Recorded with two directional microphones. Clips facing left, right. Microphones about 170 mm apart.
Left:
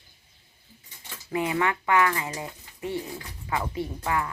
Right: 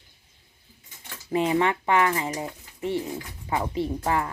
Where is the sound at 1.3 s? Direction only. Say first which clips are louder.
Right 3 dB; 25° right (ahead or behind).